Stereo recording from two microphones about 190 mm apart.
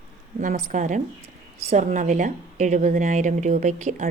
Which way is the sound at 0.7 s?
40° right (ahead or behind).